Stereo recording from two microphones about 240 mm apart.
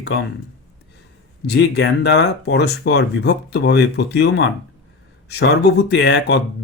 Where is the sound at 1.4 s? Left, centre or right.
Left.